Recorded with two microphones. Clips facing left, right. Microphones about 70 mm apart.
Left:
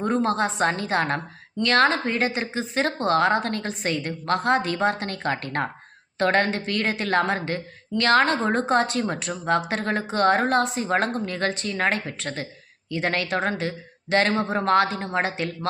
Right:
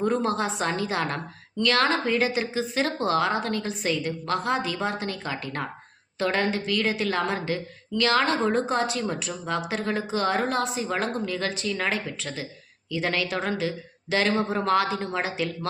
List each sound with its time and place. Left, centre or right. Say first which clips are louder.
0.0 s a woman's voice: left 2 dB; left
14.3 s speech: left 3 dB; left